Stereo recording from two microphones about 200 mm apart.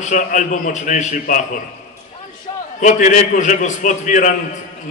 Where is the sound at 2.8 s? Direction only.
40° left (ahead or behind).